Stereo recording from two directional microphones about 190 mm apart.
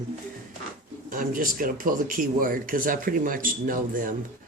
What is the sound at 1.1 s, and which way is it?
Speech, 45° right (ahead or behind).